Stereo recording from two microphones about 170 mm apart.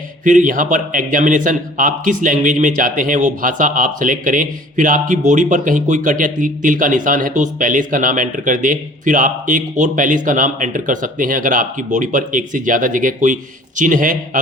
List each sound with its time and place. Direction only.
0.3 s a man's voice: 50° right (ahead or behind)